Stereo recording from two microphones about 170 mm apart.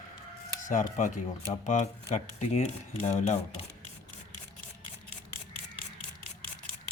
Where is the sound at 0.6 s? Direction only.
50° left (ahead or behind).